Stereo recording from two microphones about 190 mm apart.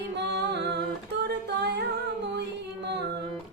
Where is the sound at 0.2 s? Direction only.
60° right (ahead or behind).